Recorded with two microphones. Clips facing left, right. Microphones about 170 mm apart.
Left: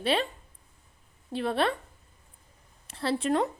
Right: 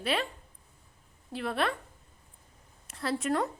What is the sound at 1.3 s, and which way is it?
Speech, 25° left (ahead or behind).